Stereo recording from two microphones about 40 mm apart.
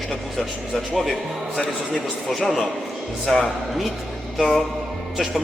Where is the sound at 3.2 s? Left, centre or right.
Centre.